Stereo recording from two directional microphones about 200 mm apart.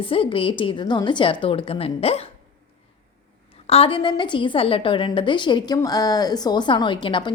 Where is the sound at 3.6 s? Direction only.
30° left (ahead or behind).